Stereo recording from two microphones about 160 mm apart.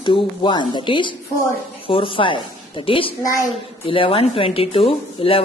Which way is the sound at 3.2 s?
20° left (ahead or behind).